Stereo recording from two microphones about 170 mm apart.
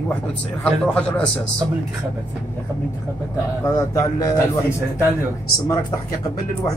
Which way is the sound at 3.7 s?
20° left (ahead or behind).